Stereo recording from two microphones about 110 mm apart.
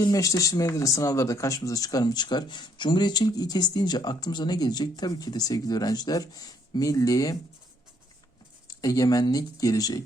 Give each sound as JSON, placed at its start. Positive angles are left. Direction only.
{"t": 0.0, "sound": "speech", "side_deg": 30}
{"t": 8.6, "sound": "speech", "side_deg": 35}